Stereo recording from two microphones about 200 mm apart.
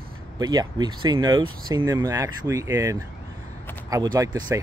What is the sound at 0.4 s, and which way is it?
Speech, 20° right (ahead or behind).